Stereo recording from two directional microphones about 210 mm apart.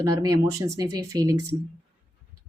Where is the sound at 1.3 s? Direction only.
90° right.